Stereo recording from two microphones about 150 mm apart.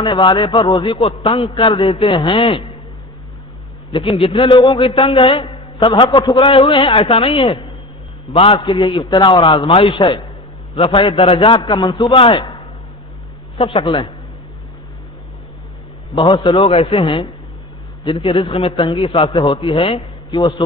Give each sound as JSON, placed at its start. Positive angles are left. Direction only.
{"t": 0.0, "sound": "a man's voice", "side_deg": 30}
{"t": 1.0, "sound": "a man's voice", "side_deg": 40}
{"t": 3.9, "sound": "a man's voice", "side_deg": 35}
{"t": 13.6, "sound": "a man's voice", "side_deg": 35}
{"t": 16.2, "sound": "a man's voice", "side_deg": 30}
{"t": 18.2, "sound": "a man's voice", "side_deg": 30}